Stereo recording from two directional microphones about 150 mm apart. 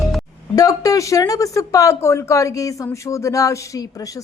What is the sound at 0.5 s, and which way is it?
Speech, 25° left (ahead or behind).